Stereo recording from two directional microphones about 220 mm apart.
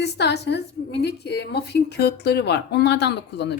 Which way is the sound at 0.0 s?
50° left (ahead or behind).